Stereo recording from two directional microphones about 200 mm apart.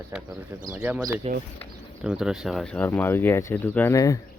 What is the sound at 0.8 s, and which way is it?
Speech, 10° right (ahead or behind).